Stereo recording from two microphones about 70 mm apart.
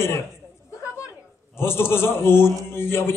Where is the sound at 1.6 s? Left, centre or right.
Left.